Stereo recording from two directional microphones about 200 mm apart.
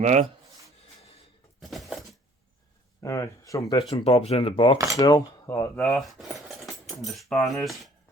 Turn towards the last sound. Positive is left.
turn(degrees=0)  # may be behind; listen again after turning